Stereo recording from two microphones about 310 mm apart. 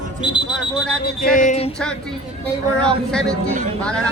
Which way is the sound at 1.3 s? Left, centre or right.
Left.